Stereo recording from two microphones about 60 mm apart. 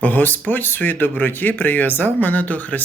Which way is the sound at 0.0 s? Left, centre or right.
Left.